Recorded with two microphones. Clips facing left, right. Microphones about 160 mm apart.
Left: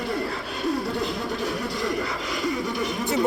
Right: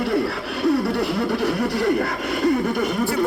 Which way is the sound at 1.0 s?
65° right (ahead or behind).